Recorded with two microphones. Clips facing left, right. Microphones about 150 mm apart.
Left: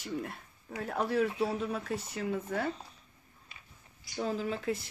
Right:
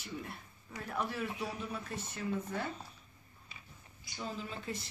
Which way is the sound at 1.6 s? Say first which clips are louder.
Left 7 dB; 75° left (ahead or behind).